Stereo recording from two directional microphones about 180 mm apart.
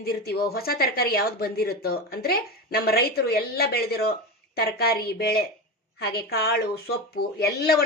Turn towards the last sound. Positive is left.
turn(degrees=60)  # may be behind; listen again after turning